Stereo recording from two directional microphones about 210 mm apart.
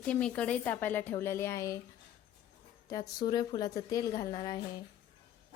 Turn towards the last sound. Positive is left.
turn(degrees=20)  # may be behind; listen again after turning